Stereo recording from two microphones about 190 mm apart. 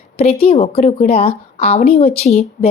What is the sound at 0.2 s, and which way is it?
A woman's voice, 30° left (ahead or behind).